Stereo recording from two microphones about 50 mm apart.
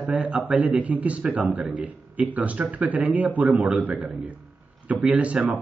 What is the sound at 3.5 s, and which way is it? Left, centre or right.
Speech, centre.